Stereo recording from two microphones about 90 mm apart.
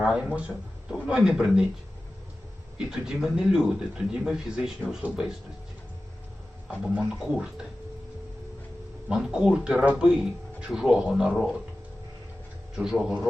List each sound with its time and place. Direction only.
0.0 s speech: 5° right (ahead or behind)
2.7 s speech: 5° right (ahead or behind)
6.9 s speech: 5° right (ahead or behind)
9.0 s speech: 10° right (ahead or behind)
12.7 s speech: 5° right (ahead or behind)